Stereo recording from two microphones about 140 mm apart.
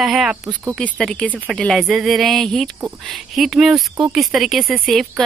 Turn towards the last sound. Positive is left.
turn(degrees=0)  # may be behind; listen again after turning